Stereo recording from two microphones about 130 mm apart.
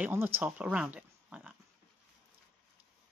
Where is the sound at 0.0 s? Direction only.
15° right (ahead or behind).